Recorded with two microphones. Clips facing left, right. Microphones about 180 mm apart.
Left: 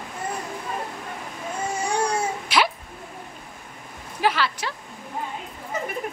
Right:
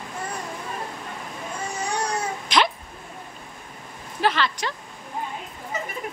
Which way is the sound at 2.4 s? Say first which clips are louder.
Right 2 dB; 10° left (ahead or behind).